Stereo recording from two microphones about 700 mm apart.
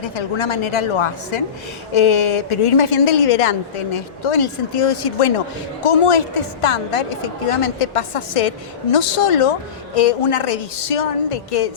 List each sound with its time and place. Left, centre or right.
0.0 s a woman's voice: left